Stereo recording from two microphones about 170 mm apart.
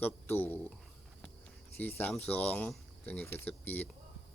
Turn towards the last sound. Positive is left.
turn(degrees=10)  # may be behind; listen again after turning